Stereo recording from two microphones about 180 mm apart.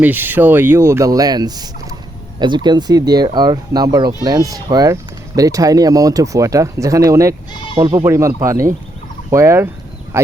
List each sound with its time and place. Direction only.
0.0 s speech: 10° right (ahead or behind)